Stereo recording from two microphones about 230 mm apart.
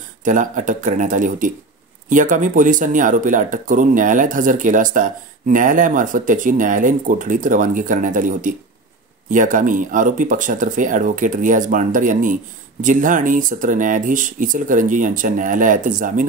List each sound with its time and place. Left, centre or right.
0.2 s speech: right